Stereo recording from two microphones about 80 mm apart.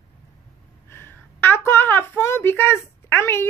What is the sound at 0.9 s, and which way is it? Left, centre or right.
A woman's voice, left.